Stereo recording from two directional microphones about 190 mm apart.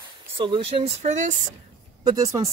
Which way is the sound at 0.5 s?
25° right (ahead or behind).